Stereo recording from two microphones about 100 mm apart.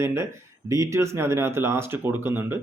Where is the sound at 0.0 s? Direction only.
30° right (ahead or behind).